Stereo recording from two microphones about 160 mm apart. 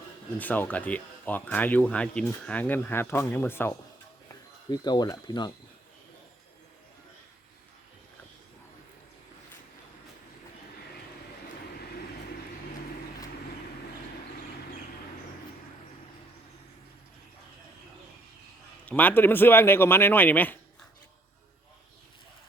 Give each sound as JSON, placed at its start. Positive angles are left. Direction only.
{"t": 0.3, "sound": "speech", "side_deg": 10}
{"t": 4.7, "sound": "speech", "side_deg": 25}
{"t": 18.9, "sound": "speech", "side_deg": 10}